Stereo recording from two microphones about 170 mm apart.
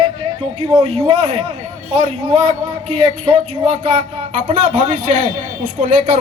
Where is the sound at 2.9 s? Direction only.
30° right (ahead or behind).